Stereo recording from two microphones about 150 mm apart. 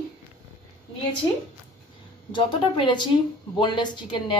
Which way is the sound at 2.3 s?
35° left (ahead or behind).